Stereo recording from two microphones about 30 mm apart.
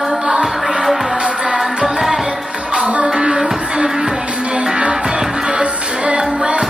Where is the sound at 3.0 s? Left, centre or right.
Right.